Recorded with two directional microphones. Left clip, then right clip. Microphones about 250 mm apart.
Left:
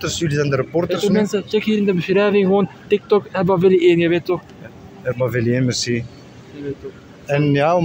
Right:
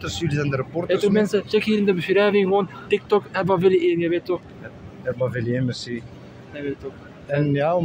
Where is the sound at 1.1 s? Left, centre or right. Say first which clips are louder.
Left 1 dB; centre; by 6.0 s left.